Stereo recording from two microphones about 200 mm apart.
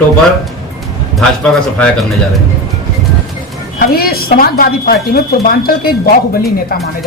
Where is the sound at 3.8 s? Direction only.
50° left (ahead or behind).